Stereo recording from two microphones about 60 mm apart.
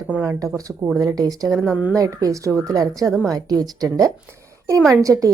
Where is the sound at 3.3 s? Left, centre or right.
Right.